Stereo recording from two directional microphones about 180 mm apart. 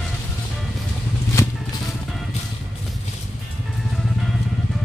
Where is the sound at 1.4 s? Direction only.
15° left (ahead or behind).